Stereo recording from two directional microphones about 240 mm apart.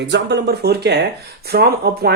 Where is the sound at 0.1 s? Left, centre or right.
Right.